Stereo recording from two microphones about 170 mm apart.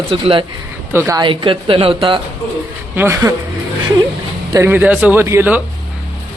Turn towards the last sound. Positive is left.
turn(degrees=-10)  # may be behind; listen again after turning